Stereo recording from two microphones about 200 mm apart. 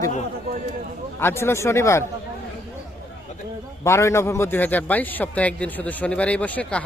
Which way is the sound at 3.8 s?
15° left (ahead or behind).